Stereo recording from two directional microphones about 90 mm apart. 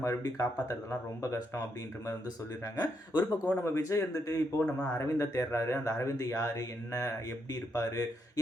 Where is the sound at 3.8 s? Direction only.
35° left (ahead or behind).